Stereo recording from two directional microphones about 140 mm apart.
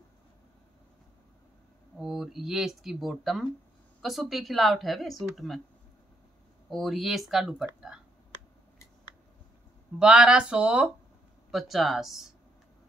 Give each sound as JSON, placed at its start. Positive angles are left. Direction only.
{"t": 2.0, "sound": "speech", "side_deg": -5}
{"t": 6.7, "sound": "speech", "side_deg": 0}
{"t": 9.9, "sound": "speech", "side_deg": -5}